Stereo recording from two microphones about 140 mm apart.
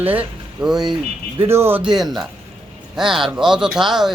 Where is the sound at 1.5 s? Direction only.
15° right (ahead or behind).